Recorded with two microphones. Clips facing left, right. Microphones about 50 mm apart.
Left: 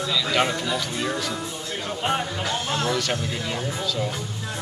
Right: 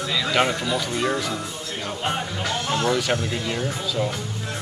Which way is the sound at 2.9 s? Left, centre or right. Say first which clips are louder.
Right 4 dB; centre.